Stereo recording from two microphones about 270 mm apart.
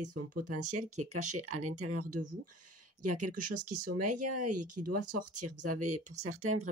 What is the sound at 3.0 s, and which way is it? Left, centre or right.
Speech, right.